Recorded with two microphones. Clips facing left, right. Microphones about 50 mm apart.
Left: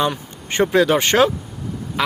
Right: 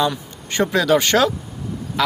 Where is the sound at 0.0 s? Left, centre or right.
Left.